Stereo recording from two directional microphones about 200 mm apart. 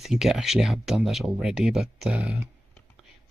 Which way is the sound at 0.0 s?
Centre (ahead or behind).